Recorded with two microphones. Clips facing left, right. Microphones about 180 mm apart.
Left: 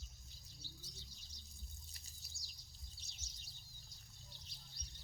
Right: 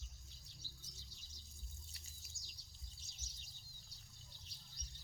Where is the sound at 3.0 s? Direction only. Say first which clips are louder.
Left 1 dB; 70° left (ahead or behind).